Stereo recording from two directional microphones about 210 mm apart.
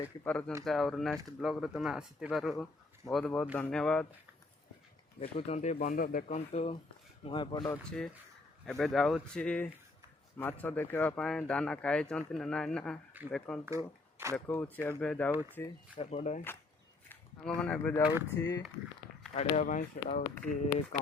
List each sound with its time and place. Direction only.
0.0 s speech: 5° left (ahead or behind)
5.2 s speech: 35° left (ahead or behind)
7.9 s speech: centre (ahead or behind)
13.7 s speech: 15° right (ahead or behind)
14.3 s speech: 10° left (ahead or behind)
16.0 s speech: 35° left (ahead or behind)
17.1 s speech: 5° left (ahead or behind)
18.3 s speech: 15° left (ahead or behind)
19.3 s speech: 35° left (ahead or behind)